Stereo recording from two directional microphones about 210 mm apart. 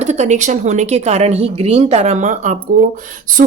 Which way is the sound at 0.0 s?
35° right (ahead or behind).